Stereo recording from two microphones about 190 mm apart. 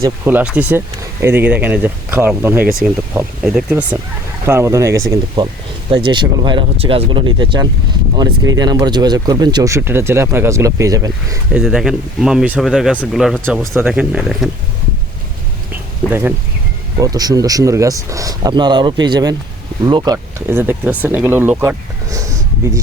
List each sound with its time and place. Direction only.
0.0 s speech: 10° right (ahead or behind)
11.5 s speech: centre (ahead or behind)
13.6 s speech: 10° right (ahead or behind)
15.7 s a sound: 10° right (ahead or behind)
17.0 s speech: 20° right (ahead or behind)